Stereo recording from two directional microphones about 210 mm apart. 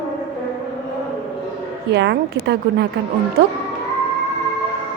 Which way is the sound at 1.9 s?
55° right (ahead or behind).